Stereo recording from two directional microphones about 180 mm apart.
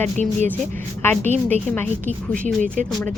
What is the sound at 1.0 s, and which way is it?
Speech, 10° left (ahead or behind).